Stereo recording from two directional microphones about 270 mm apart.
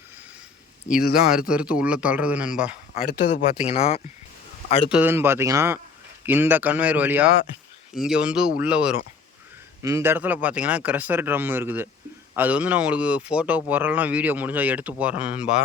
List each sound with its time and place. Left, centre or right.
1.1 s speech: centre
3.1 s speech: left
3.7 s speech: left
4.9 s speech: centre